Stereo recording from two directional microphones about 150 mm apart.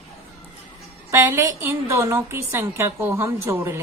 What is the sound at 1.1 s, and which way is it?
A woman's voice, 20° right (ahead or behind).